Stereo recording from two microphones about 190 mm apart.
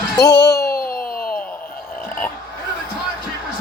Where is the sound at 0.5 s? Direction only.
50° left (ahead or behind).